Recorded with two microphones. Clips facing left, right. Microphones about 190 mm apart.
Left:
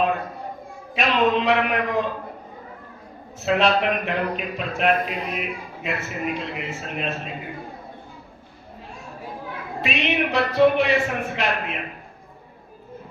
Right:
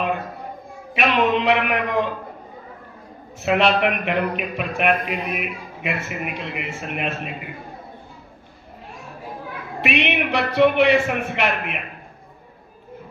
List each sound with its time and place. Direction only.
0.9 s speech: 60° right (ahead or behind)
3.4 s speech: 65° right (ahead or behind)
9.8 s speech: 65° right (ahead or behind)